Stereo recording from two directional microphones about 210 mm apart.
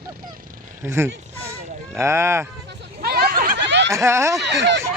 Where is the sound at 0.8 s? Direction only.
10° right (ahead or behind).